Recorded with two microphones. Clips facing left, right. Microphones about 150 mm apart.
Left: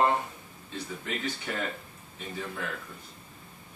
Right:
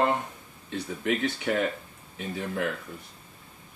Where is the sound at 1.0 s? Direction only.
70° right (ahead or behind).